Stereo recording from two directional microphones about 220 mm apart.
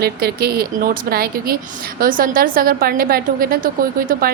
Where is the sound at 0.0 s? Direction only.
45° right (ahead or behind).